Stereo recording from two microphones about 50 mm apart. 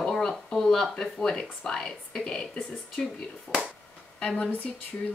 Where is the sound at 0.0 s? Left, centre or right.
Centre.